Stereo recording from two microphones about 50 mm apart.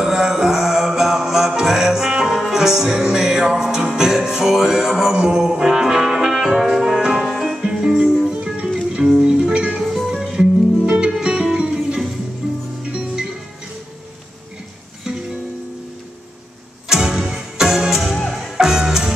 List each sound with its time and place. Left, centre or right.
0.0 s music: centre
9.8 s music: centre
16.9 s music: centre